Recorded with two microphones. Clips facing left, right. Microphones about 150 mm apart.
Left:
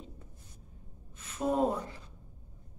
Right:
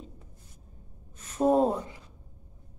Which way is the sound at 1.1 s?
40° right (ahead or behind).